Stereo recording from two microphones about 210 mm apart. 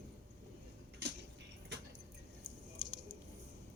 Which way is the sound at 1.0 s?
55° right (ahead or behind).